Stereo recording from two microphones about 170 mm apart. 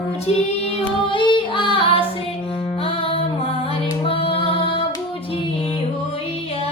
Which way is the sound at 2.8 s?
35° left (ahead or behind).